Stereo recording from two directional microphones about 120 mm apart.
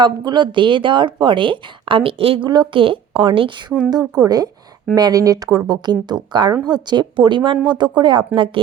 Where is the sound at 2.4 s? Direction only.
40° right (ahead or behind).